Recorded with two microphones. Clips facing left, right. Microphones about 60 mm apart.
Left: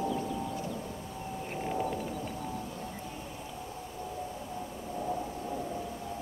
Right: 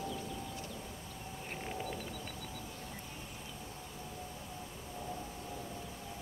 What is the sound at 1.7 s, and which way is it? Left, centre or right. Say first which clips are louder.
Music: left 8 dB; left.